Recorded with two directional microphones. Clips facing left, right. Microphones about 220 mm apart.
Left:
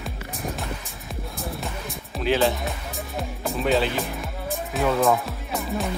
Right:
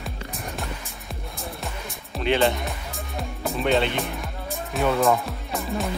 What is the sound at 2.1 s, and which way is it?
Speech, centre (ahead or behind).